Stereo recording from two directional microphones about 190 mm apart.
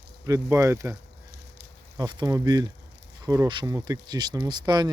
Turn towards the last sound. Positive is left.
turn(degrees=-20)  # may be behind; listen again after turning